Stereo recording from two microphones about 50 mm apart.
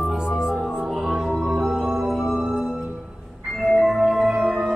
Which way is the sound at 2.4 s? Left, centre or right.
Centre.